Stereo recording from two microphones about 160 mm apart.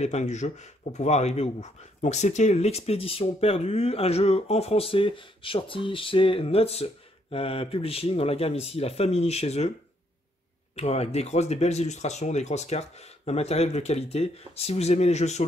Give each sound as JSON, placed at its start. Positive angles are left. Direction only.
{"t": 0.0, "sound": "speech", "side_deg": 45}
{"t": 10.8, "sound": "speech", "side_deg": 40}